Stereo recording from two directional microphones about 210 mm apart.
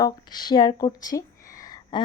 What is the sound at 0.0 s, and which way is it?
A woman's voice, 20° left (ahead or behind).